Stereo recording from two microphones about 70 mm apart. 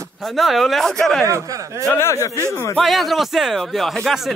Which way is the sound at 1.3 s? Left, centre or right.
Right.